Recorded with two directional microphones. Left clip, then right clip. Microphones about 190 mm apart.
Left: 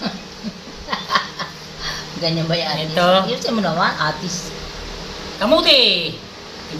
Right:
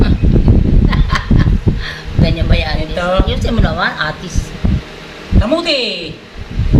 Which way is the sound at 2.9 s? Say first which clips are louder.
Left 2 dB; 15° left (ahead or behind).